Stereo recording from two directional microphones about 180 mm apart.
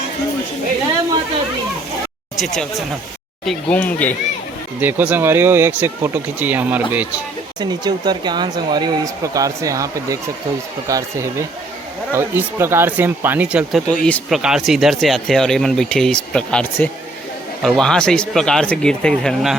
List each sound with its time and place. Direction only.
2.4 s speech: centre (ahead or behind)
4.8 s speech: 10° right (ahead or behind)
7.6 s speech: 25° right (ahead or behind); by 19.5 s centre (ahead or behind)